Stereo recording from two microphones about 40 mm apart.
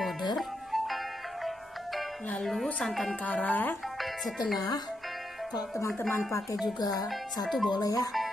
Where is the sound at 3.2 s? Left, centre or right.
Left.